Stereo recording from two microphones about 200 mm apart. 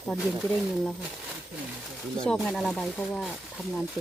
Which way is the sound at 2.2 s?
5° left (ahead or behind).